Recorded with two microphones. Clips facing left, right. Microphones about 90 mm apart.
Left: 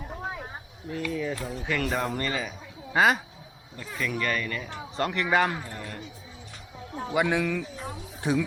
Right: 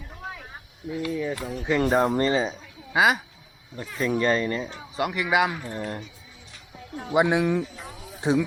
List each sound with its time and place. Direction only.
0.2 s a sound: 25° left (ahead or behind)
0.9 s speech: 5° right (ahead or behind)
1.6 s speech: 25° right (ahead or behind)
1.9 s speech: 35° right (ahead or behind)
2.9 s speech: 5° right (ahead or behind)
3.9 s speech: 30° right (ahead or behind)
4.9 s a man's voice: 10° right (ahead or behind)
5.6 s speech: 25° right (ahead or behind)
6.7 s a sound: 30° left (ahead or behind)
7.1 s speech: 20° right (ahead or behind)
7.9 s a sound: 35° left (ahead or behind)